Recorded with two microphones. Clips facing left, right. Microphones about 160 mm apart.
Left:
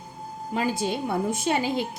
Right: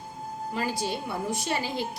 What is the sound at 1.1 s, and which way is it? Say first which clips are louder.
Speech: left 5 dB; 50° left (ahead or behind).